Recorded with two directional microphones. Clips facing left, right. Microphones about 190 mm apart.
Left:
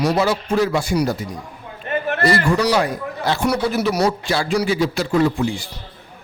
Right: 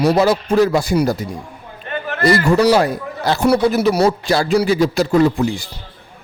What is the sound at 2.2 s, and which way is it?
A man's voice, 40° right (ahead or behind).